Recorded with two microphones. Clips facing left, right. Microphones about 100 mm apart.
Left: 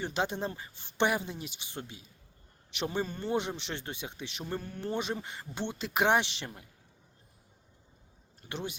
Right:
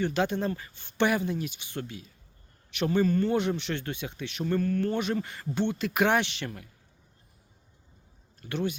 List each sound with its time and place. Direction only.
0.0 s speech: 25° left (ahead or behind)
8.4 s speech: 25° left (ahead or behind)